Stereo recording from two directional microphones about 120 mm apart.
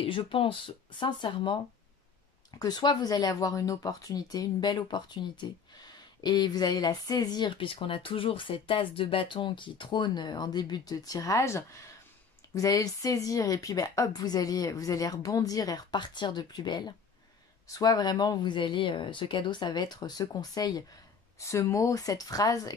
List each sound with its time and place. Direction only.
0.0 s speech: 45° left (ahead or behind)
2.6 s speech: 35° left (ahead or behind)